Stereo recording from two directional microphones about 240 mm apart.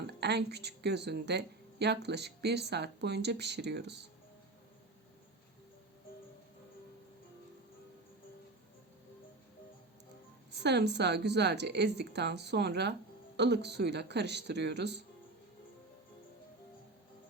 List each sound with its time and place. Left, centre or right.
0.1 s a woman's voice: right
10.5 s a woman's voice: right